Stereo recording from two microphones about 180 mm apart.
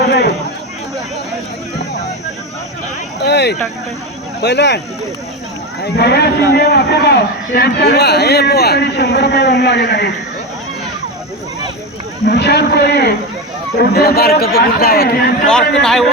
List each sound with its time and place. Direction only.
0.0 s a man's voice: 65° left (ahead or behind)
3.2 s a man's voice: 65° left (ahead or behind)
5.8 s a man's voice: 65° left (ahead or behind)
12.2 s a man's voice: 65° left (ahead or behind)
15.4 s a man's voice: 5° left (ahead or behind)